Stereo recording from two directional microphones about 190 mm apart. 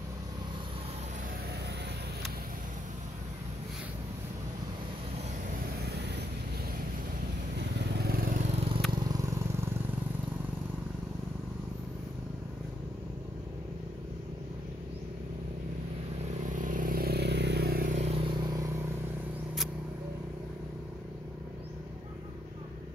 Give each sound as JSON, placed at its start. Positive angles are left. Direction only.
{"t": 5.8, "sound": "vehicle", "side_deg": -60}
{"t": 7.5, "sound": "vehicle", "side_deg": -60}
{"t": 8.5, "sound": "vehicle", "side_deg": -30}
{"t": 8.9, "sound": "vehicle", "side_deg": -20}
{"t": 16.5, "sound": "vehicle", "side_deg": -45}